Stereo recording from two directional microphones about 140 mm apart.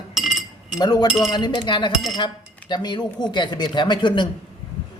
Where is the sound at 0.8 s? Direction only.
30° left (ahead or behind).